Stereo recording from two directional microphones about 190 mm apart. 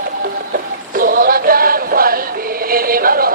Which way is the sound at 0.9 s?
50° right (ahead or behind).